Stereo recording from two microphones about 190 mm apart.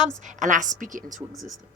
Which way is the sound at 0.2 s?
40° right (ahead or behind).